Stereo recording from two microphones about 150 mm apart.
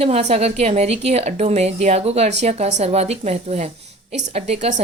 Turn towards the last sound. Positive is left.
turn(degrees=-50)  # may be behind; listen again after turning